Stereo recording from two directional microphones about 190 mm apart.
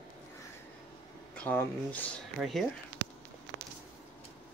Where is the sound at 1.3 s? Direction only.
10° left (ahead or behind).